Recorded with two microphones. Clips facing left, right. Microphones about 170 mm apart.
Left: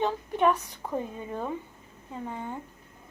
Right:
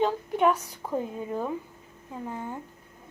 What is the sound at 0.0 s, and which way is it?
A woman's voice, 5° right (ahead or behind).